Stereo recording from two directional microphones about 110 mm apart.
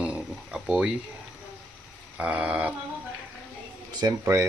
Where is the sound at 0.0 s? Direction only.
10° right (ahead or behind).